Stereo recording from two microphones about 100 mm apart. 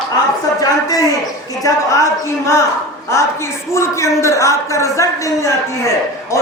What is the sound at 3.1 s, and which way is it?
A woman's voice, 30° left (ahead or behind).